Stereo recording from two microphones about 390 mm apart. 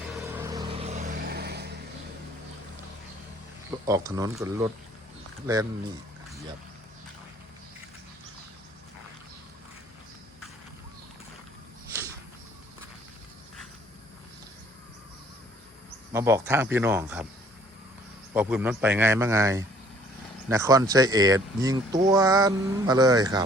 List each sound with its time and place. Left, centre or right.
0.3 s vehicle: centre; by 1.7 s right
3.8 s speech: centre
16.1 s a man's voice: centre
18.3 s a man's voice: centre